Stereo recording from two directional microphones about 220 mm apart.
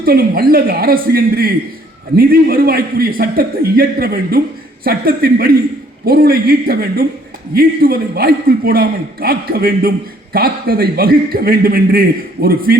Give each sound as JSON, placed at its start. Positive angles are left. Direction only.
{"t": 0.0, "sound": "a man's voice", "side_deg": -45}